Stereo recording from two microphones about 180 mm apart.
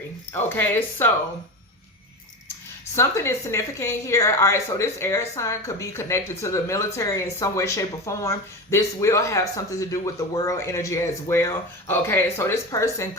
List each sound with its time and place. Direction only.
0.3 s a woman's voice: 10° left (ahead or behind)
2.9 s a woman's voice: 15° left (ahead or behind)